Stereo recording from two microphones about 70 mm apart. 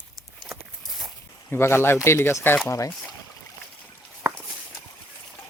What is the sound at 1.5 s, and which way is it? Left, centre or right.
Speech, left.